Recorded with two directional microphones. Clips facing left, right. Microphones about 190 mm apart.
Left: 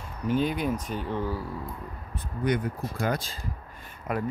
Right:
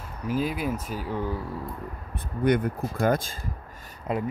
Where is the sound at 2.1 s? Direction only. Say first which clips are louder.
Right 4 dB; 55° right (ahead or behind).